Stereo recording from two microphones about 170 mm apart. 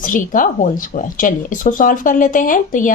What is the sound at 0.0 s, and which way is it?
Speech, 50° left (ahead or behind).